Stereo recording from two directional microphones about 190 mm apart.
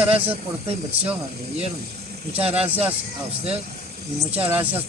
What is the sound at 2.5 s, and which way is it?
Speech, 5° right (ahead or behind).